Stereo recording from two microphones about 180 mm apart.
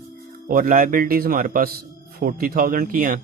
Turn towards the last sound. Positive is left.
turn(degrees=-50)  # may be behind; listen again after turning